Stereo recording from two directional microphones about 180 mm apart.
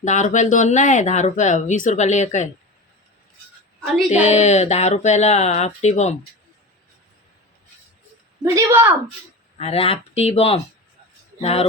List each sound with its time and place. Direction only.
0.0 s speech: 40° left (ahead or behind)
3.9 s a woman's voice: centre (ahead or behind)
4.2 s speech: 40° left (ahead or behind)
8.5 s a woman's voice: 15° right (ahead or behind)
9.6 s speech: 35° left (ahead or behind)